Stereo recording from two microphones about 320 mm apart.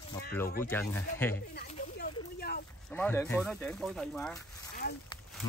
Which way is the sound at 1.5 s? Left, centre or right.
Left.